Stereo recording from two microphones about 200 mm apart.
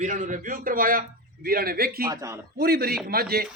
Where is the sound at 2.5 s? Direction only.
50° right (ahead or behind).